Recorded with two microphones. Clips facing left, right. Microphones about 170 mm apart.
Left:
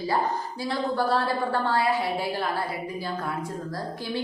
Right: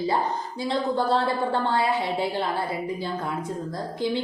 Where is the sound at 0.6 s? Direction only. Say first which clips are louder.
Right 2 dB; 25° right (ahead or behind).